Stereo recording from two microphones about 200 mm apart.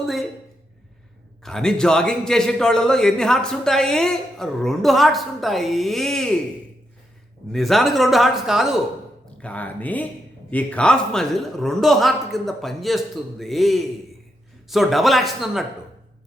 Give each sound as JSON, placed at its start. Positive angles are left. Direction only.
{"t": 0.0, "sound": "a sound", "side_deg": 0}
{"t": 1.5, "sound": "a man's voice", "side_deg": 5}
{"t": 7.5, "sound": "a man's voice", "side_deg": 0}